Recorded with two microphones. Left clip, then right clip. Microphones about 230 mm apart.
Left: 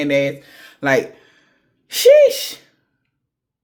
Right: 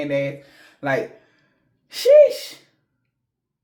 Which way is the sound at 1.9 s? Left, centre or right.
Left.